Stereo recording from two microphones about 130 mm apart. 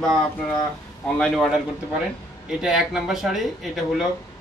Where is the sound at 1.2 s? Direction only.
5° left (ahead or behind).